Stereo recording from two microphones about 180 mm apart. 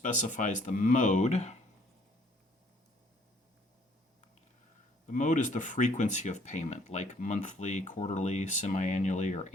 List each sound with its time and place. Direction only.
0.0 s speech: 45° left (ahead or behind)
5.0 s speech: 45° left (ahead or behind)